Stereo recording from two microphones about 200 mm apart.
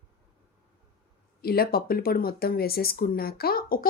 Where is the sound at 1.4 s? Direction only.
50° left (ahead or behind).